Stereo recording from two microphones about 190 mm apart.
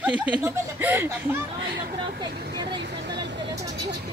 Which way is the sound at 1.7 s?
55° right (ahead or behind).